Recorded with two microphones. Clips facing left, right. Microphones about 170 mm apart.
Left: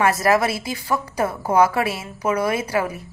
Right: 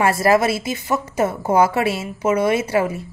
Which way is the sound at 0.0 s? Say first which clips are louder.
Right 2 dB; 30° right (ahead or behind).